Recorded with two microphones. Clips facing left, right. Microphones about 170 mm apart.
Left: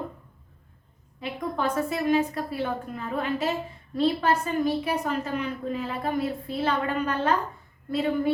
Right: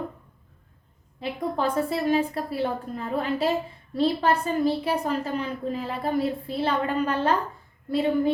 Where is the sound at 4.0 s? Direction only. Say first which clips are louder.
Right 1 dB; 30° right (ahead or behind).